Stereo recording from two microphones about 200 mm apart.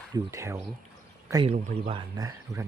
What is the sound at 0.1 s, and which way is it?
Speech, 15° right (ahead or behind).